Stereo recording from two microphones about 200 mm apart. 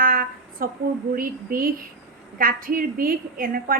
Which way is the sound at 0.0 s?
45° right (ahead or behind).